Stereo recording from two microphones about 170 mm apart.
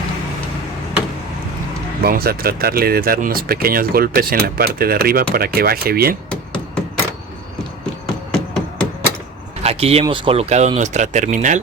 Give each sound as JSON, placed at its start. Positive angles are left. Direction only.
{"t": 2.0, "sound": "speech", "side_deg": -65}
{"t": 8.0, "sound": "hammer", "side_deg": 5}
{"t": 9.6, "sound": "speech", "side_deg": -35}